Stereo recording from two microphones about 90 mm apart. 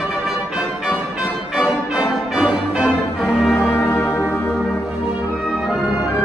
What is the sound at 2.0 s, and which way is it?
Music, 10° right (ahead or behind).